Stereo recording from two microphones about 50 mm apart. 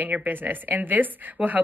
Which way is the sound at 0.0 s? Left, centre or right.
Right.